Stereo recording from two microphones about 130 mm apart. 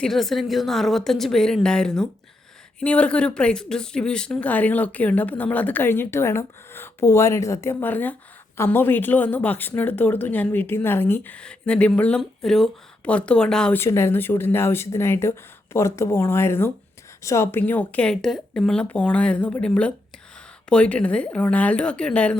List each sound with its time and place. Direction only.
0.0 s a woman's voice: centre (ahead or behind)
13.7 s speech: 20° left (ahead or behind)